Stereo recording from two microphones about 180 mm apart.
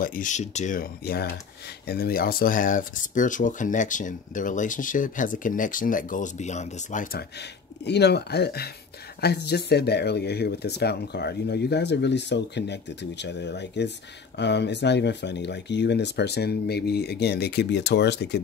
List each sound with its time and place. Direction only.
0.0 s speech: 50° left (ahead or behind); by 18.4 s 70° left (ahead or behind)